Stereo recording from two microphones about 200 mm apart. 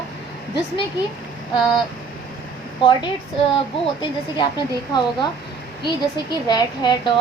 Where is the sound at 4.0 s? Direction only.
20° left (ahead or behind).